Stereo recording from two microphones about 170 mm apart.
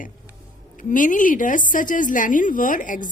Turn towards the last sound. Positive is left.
turn(degrees=50)  # may be behind; listen again after turning